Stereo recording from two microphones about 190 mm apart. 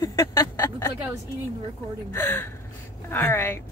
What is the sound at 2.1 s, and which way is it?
Speech, 10° left (ahead or behind).